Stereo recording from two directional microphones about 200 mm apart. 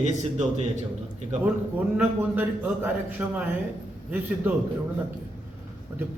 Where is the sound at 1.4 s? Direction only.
10° right (ahead or behind).